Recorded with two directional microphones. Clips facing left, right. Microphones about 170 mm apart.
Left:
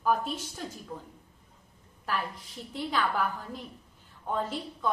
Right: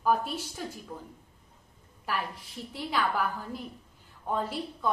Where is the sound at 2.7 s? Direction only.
10° right (ahead or behind).